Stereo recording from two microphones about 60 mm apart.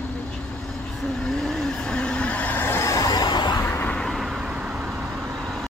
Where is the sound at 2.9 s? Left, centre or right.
Left.